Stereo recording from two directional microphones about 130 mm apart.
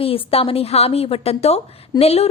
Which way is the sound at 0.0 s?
45° left (ahead or behind).